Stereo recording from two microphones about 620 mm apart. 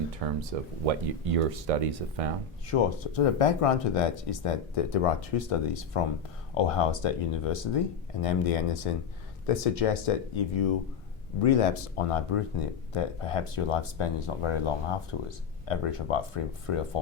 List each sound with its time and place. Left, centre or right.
0.2 s speech: right
2.6 s speech: left